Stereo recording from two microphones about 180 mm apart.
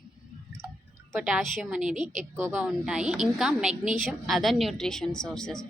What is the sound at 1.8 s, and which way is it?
Speech, 40° right (ahead or behind).